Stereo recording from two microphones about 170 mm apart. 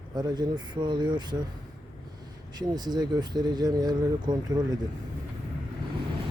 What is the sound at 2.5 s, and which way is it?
Speech, 25° right (ahead or behind).